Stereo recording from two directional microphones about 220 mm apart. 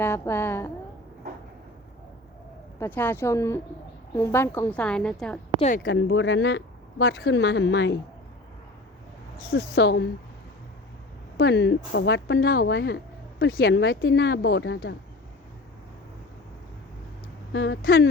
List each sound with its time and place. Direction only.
0.0 s a woman's voice: 10° left (ahead or behind)
2.7 s a woman's voice: 10° left (ahead or behind)
5.5 s speech: 30° left (ahead or behind)
5.8 s speech: 55° left (ahead or behind)
9.4 s speech: 45° left (ahead or behind)
11.3 s speech: 50° left (ahead or behind)
17.5 s speech: 55° left (ahead or behind)